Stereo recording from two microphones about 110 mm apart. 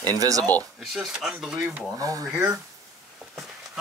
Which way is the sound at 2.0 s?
30° right (ahead or behind).